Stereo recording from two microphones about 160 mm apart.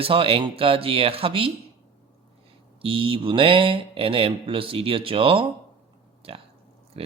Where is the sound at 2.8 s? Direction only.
35° right (ahead or behind).